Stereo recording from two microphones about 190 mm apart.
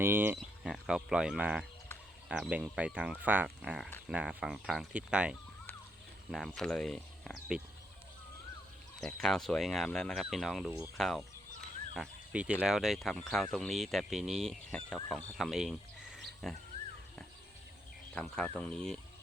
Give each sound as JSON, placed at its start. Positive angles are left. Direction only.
{"t": 0.0, "sound": "speech", "side_deg": -10}
{"t": 9.0, "sound": "speech", "side_deg": 0}
{"t": 10.7, "sound": "speech", "side_deg": -15}
{"t": 10.9, "sound": "speech", "side_deg": 0}
{"t": 16.0, "sound": "a sound", "side_deg": -60}
{"t": 18.1, "sound": "speech", "side_deg": 5}